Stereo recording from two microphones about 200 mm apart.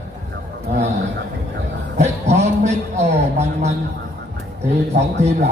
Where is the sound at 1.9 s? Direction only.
35° right (ahead or behind).